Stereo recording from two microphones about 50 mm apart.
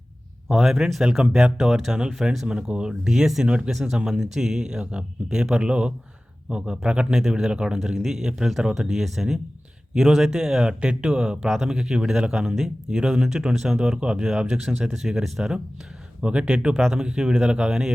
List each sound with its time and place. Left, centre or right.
0.4 s speech: centre
3.7 s speech: centre
3.9 s speech: centre
11.4 s speech: centre
11.7 s speech: centre
14.7 s speech: centre
16.2 s speech: centre